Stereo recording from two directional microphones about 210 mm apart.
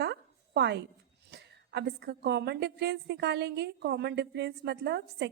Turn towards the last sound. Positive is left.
turn(degrees=-55)  # may be behind; listen again after turning